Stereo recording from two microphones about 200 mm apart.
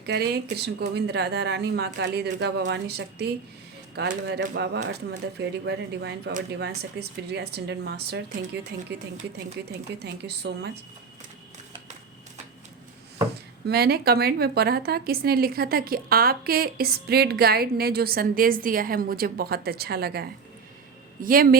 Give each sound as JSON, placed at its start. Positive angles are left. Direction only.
{"t": 0.0, "sound": "speech", "side_deg": -55}
{"t": 13.7, "sound": "a woman's voice", "side_deg": -50}